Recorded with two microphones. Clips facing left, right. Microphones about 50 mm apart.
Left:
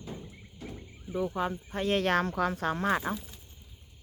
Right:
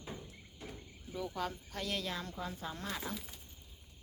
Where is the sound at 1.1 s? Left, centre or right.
Left.